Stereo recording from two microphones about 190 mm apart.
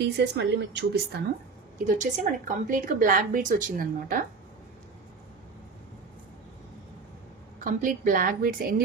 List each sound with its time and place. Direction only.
0.0 s a woman's voice: 60° right (ahead or behind)
1.9 s speech: 40° right (ahead or behind)
7.6 s speech: 45° right (ahead or behind)